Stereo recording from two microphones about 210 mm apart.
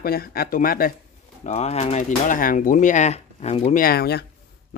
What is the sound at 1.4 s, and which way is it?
Speech, 30° left (ahead or behind).